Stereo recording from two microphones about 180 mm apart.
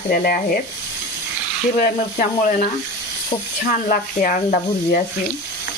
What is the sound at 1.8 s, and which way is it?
Speech, 50° left (ahead or behind).